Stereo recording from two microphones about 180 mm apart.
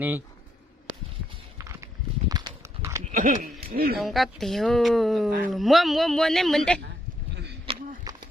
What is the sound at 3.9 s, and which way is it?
A man's voice, centre (ahead or behind).